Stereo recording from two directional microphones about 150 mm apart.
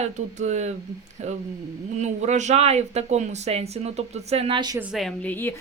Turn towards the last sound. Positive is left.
turn(degrees=0)  # may be behind; listen again after turning